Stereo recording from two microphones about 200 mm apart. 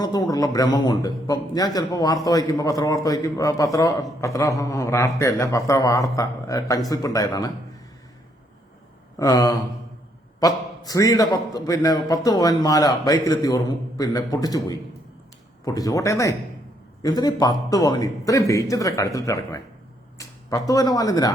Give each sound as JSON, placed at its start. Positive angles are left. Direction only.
{"t": 0.0, "sound": "a man's voice", "side_deg": 20}
{"t": 9.1, "sound": "a man's voice", "side_deg": 15}